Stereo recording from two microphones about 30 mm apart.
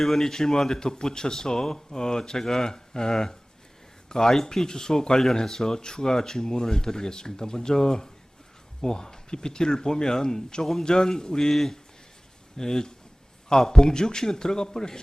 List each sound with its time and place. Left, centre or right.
0.0 s speech: centre
12.5 s speech: centre